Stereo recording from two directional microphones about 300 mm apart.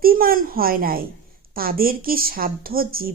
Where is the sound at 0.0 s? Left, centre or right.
Right.